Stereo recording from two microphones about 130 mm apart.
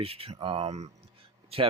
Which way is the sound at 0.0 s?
45° right (ahead or behind).